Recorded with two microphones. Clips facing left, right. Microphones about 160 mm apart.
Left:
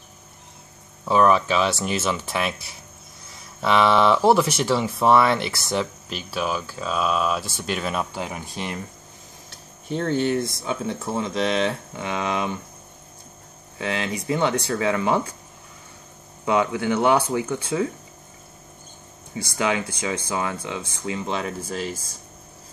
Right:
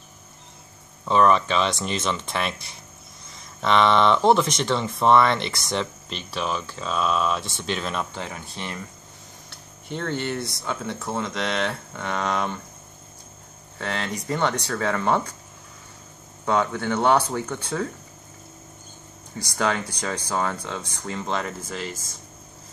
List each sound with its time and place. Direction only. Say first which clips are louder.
1.0 s speech: left 1 dB; 5° left (ahead or behind)
9.8 s speech: left 5 dB; 10° left (ahead or behind)
13.7 s speech: left 3 dB; 10° left (ahead or behind)
16.4 s speech: left 2 dB; 10° left (ahead or behind)
19.4 s speech: left 1 dB; 10° left (ahead or behind)